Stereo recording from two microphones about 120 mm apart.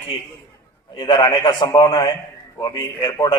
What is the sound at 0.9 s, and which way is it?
A man's voice, 40° left (ahead or behind).